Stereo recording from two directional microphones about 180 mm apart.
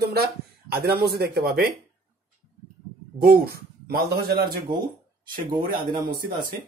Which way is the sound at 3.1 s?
55° right (ahead or behind).